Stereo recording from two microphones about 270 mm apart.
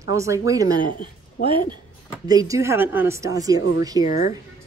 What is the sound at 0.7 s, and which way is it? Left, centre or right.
Speech, left.